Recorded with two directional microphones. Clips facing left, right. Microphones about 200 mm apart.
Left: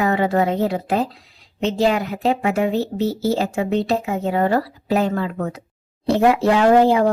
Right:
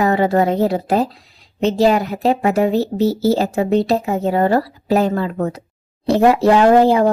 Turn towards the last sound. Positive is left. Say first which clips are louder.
# right 2 dB
turn(degrees=-35)  # may be behind; listen again after turning